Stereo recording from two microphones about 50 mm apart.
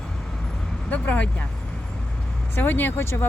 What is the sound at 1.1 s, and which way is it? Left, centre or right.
Speech, left.